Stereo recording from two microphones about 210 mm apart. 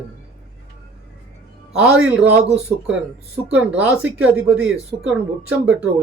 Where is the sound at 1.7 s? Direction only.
5° right (ahead or behind).